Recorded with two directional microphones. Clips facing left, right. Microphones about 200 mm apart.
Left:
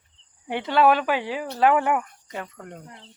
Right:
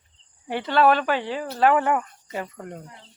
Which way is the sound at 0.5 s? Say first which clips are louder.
Even; 5° left (ahead or behind).